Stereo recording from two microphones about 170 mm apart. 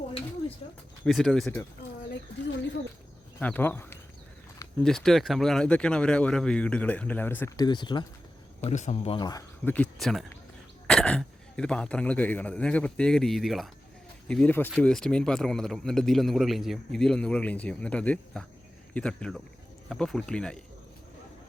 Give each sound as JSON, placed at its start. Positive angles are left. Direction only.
{"t": 1.0, "sound": "a man's voice", "side_deg": 0}
{"t": 3.4, "sound": "speech", "side_deg": 10}
{"t": 4.8, "sound": "speech", "side_deg": 0}
{"t": 8.6, "sound": "speech", "side_deg": 45}
{"t": 9.1, "sound": "speech", "side_deg": 25}
{"t": 9.6, "sound": "a man's voice", "side_deg": 10}